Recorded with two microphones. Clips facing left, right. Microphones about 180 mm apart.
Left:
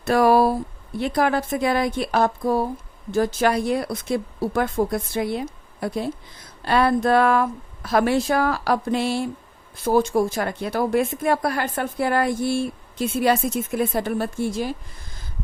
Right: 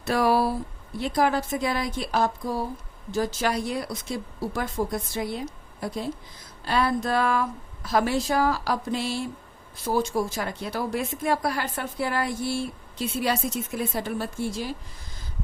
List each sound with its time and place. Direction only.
0.0 s a woman's voice: 50° left (ahead or behind)